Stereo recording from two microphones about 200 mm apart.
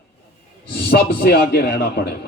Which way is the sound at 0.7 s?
50° left (ahead or behind).